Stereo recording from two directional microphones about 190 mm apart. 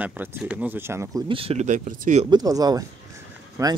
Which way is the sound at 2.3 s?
20° right (ahead or behind).